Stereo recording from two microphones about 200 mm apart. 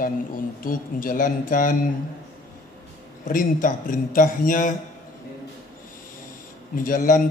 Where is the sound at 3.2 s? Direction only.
40° left (ahead or behind).